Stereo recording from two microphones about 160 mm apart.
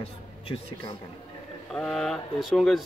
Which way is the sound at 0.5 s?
20° left (ahead or behind).